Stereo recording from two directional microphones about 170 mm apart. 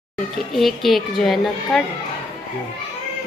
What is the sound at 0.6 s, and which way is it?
A woman's voice, centre (ahead or behind).